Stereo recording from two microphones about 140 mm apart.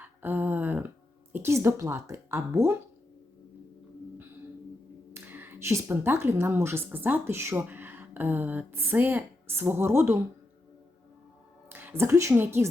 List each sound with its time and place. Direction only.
0.0 s a sound: 15° right (ahead or behind)
1.3 s a woman's voice: 20° right (ahead or behind)
5.3 s a woman's voice: 15° right (ahead or behind)
11.7 s a woman's voice: 15° right (ahead or behind)